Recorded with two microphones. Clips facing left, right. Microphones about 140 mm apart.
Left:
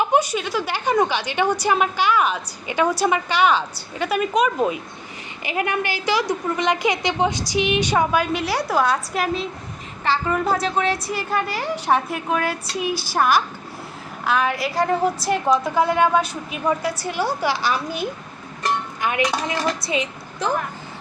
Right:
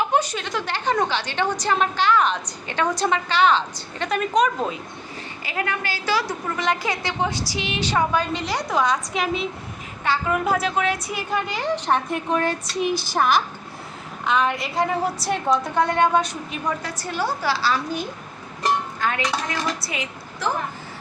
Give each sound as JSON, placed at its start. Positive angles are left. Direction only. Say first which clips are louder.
{"t": 0.0, "sound": "a woman's voice", "louder": "left 3 dB", "side_deg": 10}
{"t": 5.5, "sound": "a woman's voice", "louder": "left 4 dB", "side_deg": 20}